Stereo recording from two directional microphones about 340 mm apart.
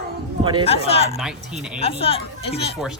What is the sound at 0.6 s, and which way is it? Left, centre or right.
Speech, centre.